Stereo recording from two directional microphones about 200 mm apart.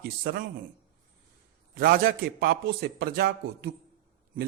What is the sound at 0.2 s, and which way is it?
Speech, 50° right (ahead or behind).